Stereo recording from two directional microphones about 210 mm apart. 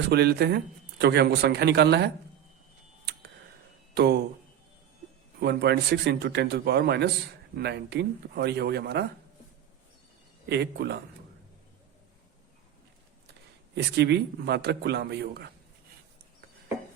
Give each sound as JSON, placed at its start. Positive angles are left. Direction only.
{"t": 0.1, "sound": "a man's voice", "side_deg": -50}
{"t": 3.9, "sound": "speech", "side_deg": -50}
{"t": 5.4, "sound": "a man's voice", "side_deg": -50}
{"t": 10.5, "sound": "a man's voice", "side_deg": -50}
{"t": 13.7, "sound": "a man's voice", "side_deg": -55}